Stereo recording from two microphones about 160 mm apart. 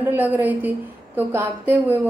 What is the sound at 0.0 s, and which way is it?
A woman's voice, 10° right (ahead or behind).